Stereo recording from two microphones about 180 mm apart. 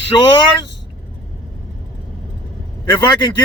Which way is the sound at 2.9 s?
25° left (ahead or behind).